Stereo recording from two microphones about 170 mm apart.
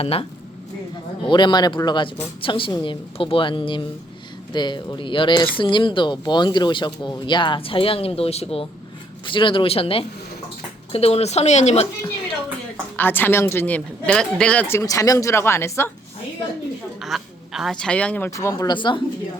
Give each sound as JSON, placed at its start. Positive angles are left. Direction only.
{"t": 0.0, "sound": "a woman's voice", "side_deg": 35}
{"t": 13.0, "sound": "speech", "side_deg": 10}
{"t": 17.0, "sound": "speech", "side_deg": 0}